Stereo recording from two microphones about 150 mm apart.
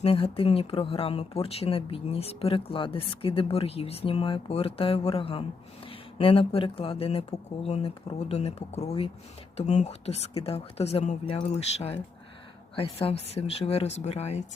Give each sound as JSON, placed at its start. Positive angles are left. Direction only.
{"t": 0.0, "sound": "speech", "side_deg": 40}